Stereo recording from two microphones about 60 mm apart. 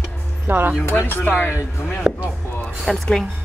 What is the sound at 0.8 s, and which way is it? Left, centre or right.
Speech, left.